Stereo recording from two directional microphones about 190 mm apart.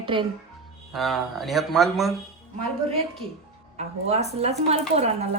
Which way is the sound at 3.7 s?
35° right (ahead or behind).